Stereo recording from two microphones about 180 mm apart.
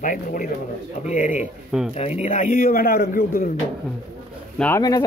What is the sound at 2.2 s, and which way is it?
A man's voice, 40° left (ahead or behind).